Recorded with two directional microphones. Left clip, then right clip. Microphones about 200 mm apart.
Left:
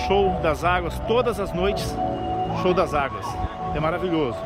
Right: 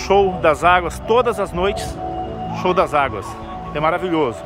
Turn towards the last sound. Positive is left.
turn(degrees=-15)  # may be behind; listen again after turning